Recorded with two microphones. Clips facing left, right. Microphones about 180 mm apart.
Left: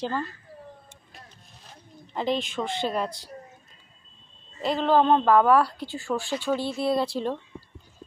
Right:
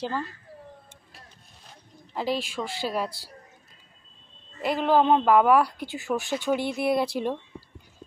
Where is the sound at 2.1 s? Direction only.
5° right (ahead or behind).